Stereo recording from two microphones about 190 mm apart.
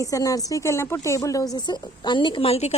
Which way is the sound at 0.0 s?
15° left (ahead or behind).